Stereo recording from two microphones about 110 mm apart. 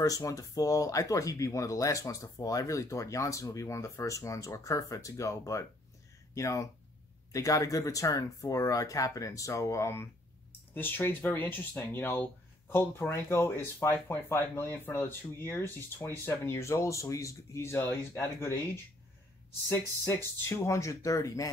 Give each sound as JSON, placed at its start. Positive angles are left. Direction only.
{"t": 0.0, "sound": "speech", "side_deg": 30}
{"t": 20.4, "sound": "speech", "side_deg": 25}